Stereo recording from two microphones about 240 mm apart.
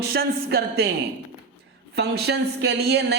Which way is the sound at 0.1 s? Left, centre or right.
Right.